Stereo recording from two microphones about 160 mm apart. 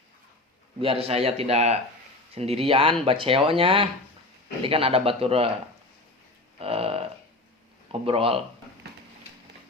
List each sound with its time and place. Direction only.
0.8 s speech: 35° right (ahead or behind)
6.6 s a sound: 35° right (ahead or behind)
8.0 s speech: 35° right (ahead or behind)